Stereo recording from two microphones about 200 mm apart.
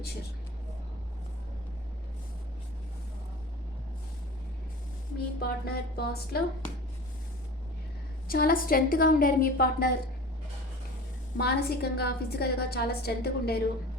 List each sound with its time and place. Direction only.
5.4 s a woman's voice: 50° left (ahead or behind)
8.3 s a woman's voice: 45° left (ahead or behind)
11.3 s a woman's voice: 50° left (ahead or behind)